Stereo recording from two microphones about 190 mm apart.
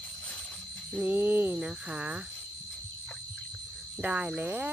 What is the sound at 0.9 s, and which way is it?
Speech, 5° right (ahead or behind).